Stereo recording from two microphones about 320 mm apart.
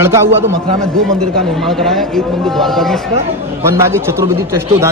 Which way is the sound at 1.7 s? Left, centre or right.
Centre.